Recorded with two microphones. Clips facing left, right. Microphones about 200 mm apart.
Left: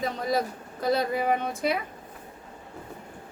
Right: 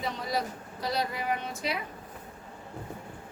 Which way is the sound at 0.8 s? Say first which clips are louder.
Left 7 dB; 50° left (ahead or behind).